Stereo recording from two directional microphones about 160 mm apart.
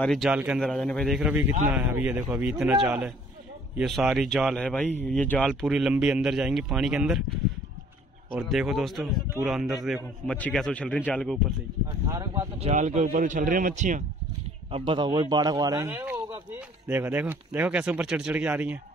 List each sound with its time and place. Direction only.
0.0 s a man's voice: centre (ahead or behind); by 2.3 s 15° right (ahead or behind)
2.3 s speech: 5° right (ahead or behind)
8.4 s speech: centre (ahead or behind)
12.6 s speech: 45° right (ahead or behind)
14.7 s a man's voice: 30° right (ahead or behind); by 18.8 s 10° right (ahead or behind)